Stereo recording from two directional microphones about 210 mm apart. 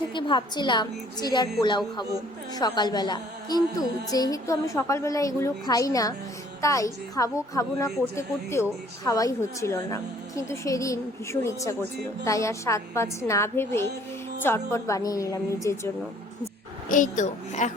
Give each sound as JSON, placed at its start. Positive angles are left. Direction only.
{"t": 0.1, "sound": "a woman's voice", "side_deg": 20}
{"t": 2.6, "sound": "music", "side_deg": 20}
{"t": 16.9, "sound": "a woman's voice", "side_deg": 35}